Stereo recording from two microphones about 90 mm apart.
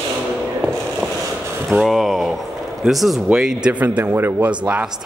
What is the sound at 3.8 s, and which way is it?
Speech, 25° right (ahead or behind).